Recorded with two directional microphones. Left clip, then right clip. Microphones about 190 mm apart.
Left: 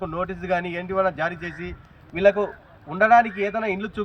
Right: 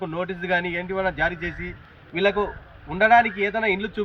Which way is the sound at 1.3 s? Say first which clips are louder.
Right 2 dB; 35° right (ahead or behind).